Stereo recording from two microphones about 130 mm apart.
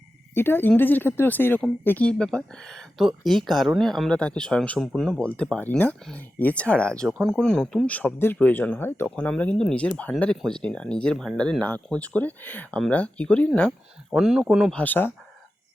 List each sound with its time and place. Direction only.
0.3 s speech: 15° left (ahead or behind); by 14.7 s 5° right (ahead or behind)
14.7 s speech: 10° left (ahead or behind)